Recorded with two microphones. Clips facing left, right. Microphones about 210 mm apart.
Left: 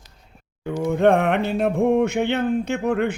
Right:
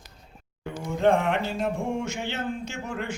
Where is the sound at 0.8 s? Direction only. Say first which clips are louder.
Left 5 dB; 60° left (ahead or behind).